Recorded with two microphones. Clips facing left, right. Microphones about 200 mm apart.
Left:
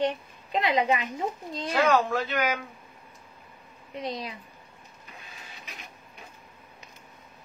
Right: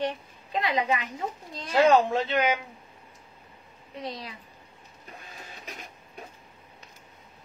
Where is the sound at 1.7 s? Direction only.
25° right (ahead or behind).